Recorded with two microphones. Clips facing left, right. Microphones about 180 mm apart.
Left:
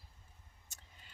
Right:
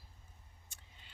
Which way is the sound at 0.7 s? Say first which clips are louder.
Left 2 dB; 45° left (ahead or behind).